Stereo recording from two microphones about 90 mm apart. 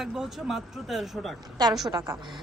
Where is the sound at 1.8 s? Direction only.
40° right (ahead or behind).